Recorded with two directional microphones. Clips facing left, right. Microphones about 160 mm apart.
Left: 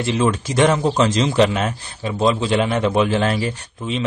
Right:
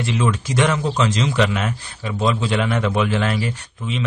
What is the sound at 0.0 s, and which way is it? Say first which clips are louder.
Speech: left 3 dB; 30° left (ahead or behind).